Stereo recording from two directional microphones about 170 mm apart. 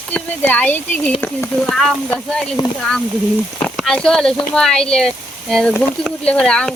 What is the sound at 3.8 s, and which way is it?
Speech, 5° left (ahead or behind).